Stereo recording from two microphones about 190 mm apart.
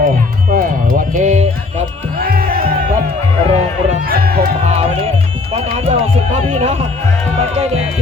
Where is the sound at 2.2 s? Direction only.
50° right (ahead or behind).